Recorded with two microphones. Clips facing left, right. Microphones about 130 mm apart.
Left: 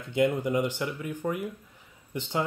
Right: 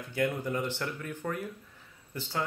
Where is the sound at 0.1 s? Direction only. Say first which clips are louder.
Left 6 dB; 20° left (ahead or behind).